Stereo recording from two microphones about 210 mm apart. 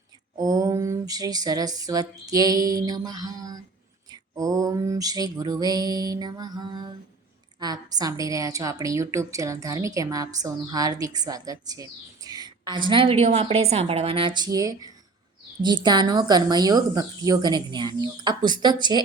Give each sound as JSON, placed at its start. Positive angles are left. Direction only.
{"t": 0.3, "sound": "a sound", "side_deg": -15}
{"t": 4.1, "sound": "music", "side_deg": -15}
{"t": 10.4, "sound": "speech", "side_deg": -15}